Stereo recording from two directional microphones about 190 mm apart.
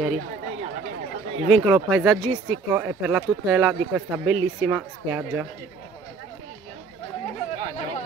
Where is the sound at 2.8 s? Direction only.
5° right (ahead or behind).